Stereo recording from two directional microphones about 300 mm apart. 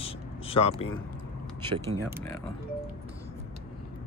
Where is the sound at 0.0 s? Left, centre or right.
Centre.